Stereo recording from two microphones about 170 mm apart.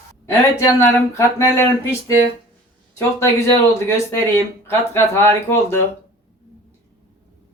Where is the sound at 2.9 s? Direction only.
15° left (ahead or behind).